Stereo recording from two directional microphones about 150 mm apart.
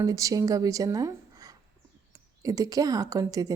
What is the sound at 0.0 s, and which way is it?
Speech, 20° right (ahead or behind).